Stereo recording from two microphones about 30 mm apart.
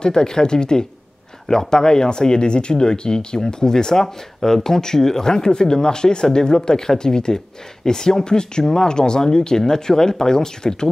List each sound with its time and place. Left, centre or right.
0.0 s speech: left